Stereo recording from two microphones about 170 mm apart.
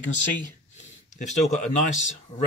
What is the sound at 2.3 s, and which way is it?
Speech, 45° left (ahead or behind).